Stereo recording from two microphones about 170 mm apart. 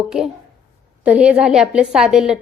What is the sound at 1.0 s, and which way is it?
A woman's voice, 5° right (ahead or behind).